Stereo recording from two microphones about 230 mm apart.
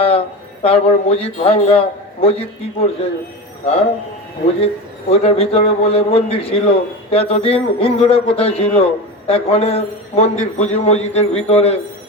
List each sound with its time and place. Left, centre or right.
0.0 s speech: left
4.6 s a man's voice: left